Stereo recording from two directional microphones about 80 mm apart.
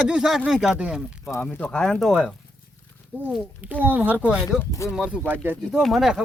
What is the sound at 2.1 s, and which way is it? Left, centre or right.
Speech, centre.